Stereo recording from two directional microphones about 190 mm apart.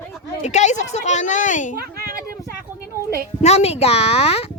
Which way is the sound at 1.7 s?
50° right (ahead or behind).